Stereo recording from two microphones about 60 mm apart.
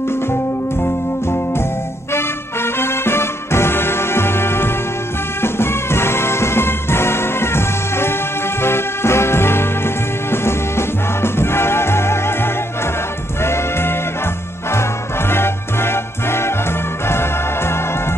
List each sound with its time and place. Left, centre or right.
2.1 s music: left